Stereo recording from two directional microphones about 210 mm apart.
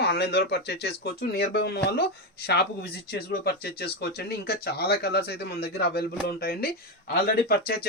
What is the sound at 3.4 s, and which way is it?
Speech, 50° left (ahead or behind).